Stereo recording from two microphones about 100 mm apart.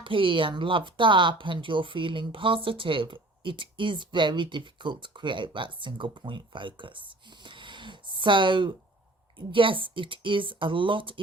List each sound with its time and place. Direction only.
0.0 s speech: 60° right (ahead or behind)